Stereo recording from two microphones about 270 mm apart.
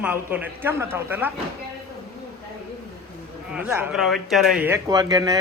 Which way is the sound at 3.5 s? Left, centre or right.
Centre.